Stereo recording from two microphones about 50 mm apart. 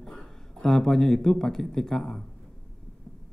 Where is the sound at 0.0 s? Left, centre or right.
Centre.